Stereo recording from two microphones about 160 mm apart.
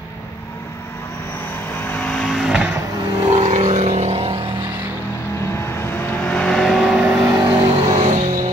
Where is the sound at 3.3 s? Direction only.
45° right (ahead or behind).